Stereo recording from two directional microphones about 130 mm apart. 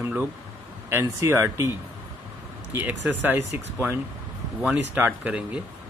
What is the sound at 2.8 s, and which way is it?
Speech, 15° right (ahead or behind).